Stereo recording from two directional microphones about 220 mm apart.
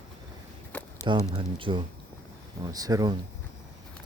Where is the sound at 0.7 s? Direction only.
10° left (ahead or behind).